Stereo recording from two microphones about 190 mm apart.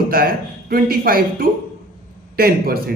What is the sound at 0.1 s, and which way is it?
A man's voice, 50° right (ahead or behind).